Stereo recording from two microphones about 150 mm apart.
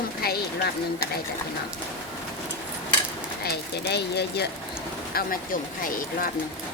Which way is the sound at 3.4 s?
90° left.